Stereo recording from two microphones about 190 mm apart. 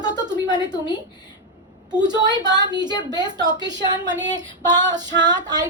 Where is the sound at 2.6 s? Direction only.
20° right (ahead or behind).